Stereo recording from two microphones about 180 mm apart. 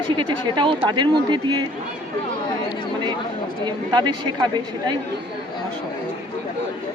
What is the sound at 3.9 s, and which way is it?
Speech, 25° right (ahead or behind).